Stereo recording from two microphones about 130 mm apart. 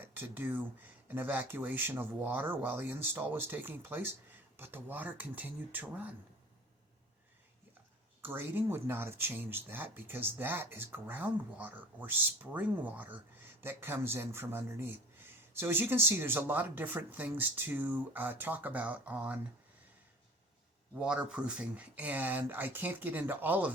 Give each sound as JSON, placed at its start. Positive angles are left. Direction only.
{"t": 0.0, "sound": "speech", "side_deg": -15}
{"t": 8.2, "sound": "speech", "side_deg": -15}
{"t": 21.0, "sound": "speech", "side_deg": -10}